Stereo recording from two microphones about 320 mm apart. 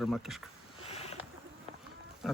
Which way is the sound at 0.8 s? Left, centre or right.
Centre.